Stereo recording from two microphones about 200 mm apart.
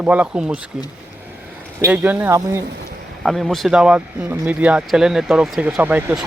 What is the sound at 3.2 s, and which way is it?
Speech, centre (ahead or behind).